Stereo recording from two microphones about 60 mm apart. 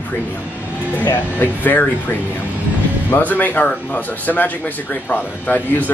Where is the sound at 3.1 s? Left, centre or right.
Left.